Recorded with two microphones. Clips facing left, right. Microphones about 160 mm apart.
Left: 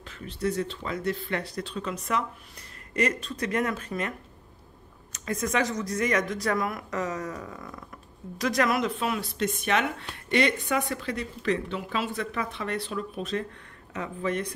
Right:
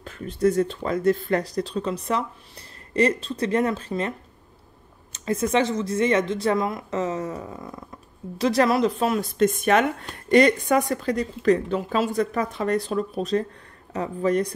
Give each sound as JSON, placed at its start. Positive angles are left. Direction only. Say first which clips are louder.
{"t": 0.0, "sound": "speech", "louder": "right 8 dB", "side_deg": -45}
{"t": 5.1, "sound": "speech", "louder": "right 6 dB", "side_deg": -30}